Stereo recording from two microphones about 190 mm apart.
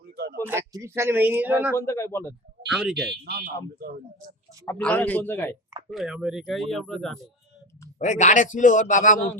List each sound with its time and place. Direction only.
0.0 s a sound: 55° right (ahead or behind)
0.4 s a man's voice: 15° right (ahead or behind)
1.7 s a man's voice: 15° left (ahead or behind)
2.6 s speech: centre (ahead or behind)
3.1 s speech: 55° right (ahead or behind)
4.6 s a man's voice: 10° left (ahead or behind)
5.9 s speech: centre (ahead or behind)
7.9 s speech: 40° left (ahead or behind)